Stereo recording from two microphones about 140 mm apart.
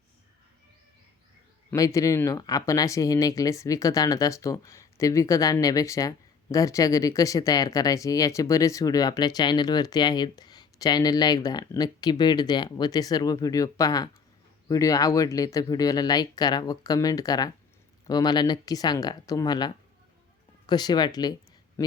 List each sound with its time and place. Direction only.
1.7 s speech: 25° left (ahead or behind)